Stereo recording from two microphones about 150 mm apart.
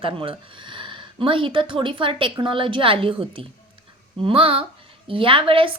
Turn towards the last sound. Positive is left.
turn(degrees=-35)  # may be behind; listen again after turning